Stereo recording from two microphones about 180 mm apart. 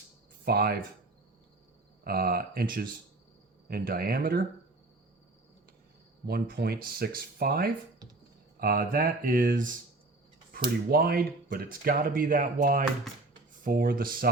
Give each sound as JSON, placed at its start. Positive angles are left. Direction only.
{"t": 0.4, "sound": "speech", "side_deg": -60}
{"t": 2.0, "sound": "speech", "side_deg": -55}
{"t": 6.2, "sound": "speech", "side_deg": -60}